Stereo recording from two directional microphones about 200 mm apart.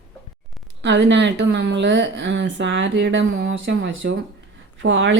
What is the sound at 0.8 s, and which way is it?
A woman's voice, 60° right (ahead or behind).